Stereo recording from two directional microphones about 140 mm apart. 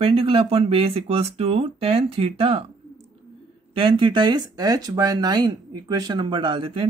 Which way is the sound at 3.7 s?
40° right (ahead or behind).